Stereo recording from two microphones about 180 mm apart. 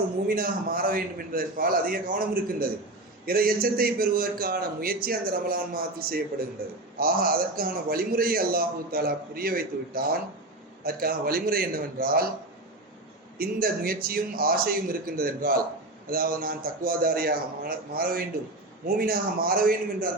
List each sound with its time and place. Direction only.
0.3 s a man's voice: 55° right (ahead or behind)
13.4 s a man's voice: 55° right (ahead or behind)